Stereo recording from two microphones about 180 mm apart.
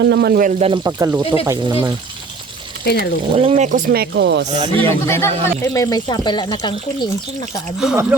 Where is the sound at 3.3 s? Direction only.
35° right (ahead or behind); by 4.4 s 75° right (ahead or behind).